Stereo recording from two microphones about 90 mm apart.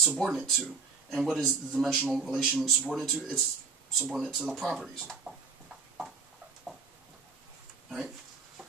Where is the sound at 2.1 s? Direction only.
5° right (ahead or behind).